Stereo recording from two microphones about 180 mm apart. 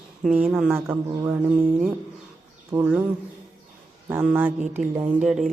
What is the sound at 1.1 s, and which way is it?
Mantra, 25° right (ahead or behind).